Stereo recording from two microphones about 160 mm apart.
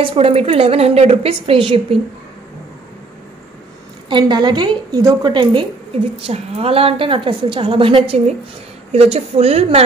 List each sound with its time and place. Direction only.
0.1 s a woman's voice: 40° right (ahead or behind)
4.1 s a woman's voice: 30° right (ahead or behind)